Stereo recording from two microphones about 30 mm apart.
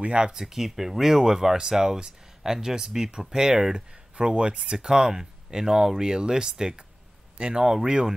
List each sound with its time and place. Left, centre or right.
0.4 s speech: centre
3.7 s speech: right